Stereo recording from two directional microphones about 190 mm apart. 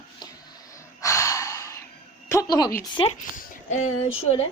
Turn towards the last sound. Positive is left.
turn(degrees=30)  # may be behind; listen again after turning